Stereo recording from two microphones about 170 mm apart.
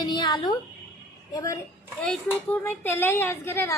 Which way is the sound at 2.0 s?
5° left (ahead or behind).